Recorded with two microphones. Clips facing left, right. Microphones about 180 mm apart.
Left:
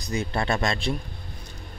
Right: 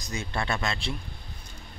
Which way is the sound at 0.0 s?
35° left (ahead or behind).